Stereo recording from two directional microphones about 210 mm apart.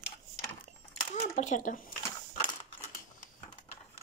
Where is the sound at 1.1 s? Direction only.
35° left (ahead or behind).